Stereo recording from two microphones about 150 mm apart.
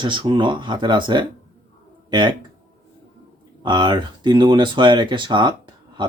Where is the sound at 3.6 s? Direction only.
30° right (ahead or behind).